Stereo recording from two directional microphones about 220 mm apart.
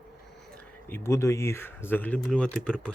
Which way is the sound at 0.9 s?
10° left (ahead or behind).